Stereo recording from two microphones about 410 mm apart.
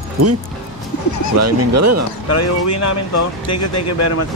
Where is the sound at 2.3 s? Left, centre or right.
Left.